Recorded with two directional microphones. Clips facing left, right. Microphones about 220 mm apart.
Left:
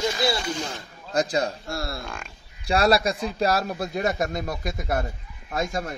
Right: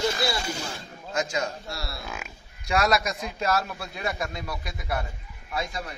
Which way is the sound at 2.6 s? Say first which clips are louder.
Left 4 dB; 30° left (ahead or behind).